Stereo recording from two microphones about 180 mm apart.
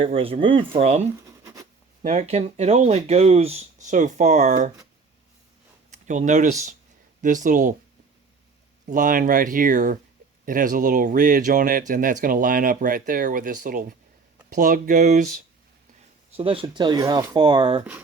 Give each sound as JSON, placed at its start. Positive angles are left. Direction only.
{"t": 0.1, "sound": "speech", "side_deg": -30}
{"t": 6.1, "sound": "speech", "side_deg": -40}
{"t": 8.9, "sound": "speech", "side_deg": -45}
{"t": 16.4, "sound": "speech", "side_deg": -30}